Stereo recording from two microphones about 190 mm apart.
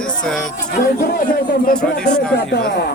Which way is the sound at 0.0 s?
5° left (ahead or behind).